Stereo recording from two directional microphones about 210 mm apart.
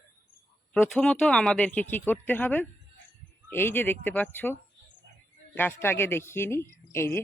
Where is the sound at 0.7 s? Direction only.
5° left (ahead or behind).